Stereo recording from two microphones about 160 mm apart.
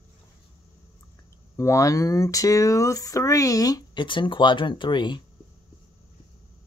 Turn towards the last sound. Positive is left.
turn(degrees=30)  # may be behind; listen again after turning